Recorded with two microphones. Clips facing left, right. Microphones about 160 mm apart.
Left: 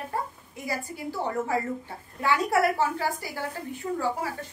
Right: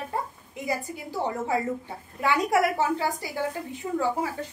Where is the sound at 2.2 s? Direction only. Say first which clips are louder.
Right 1 dB; 15° right (ahead or behind).